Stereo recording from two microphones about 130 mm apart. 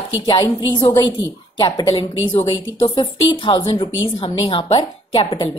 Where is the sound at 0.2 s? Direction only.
35° left (ahead or behind).